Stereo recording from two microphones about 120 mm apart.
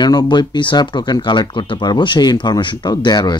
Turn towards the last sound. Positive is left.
turn(degrees=35)  # may be behind; listen again after turning